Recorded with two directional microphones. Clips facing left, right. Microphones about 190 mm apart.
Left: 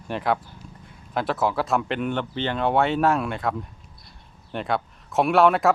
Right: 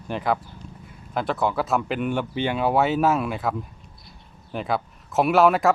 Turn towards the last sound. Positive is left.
turn(degrees=0)  # may be behind; listen again after turning